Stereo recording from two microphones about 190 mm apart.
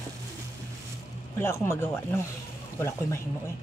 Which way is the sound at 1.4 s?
15° left (ahead or behind).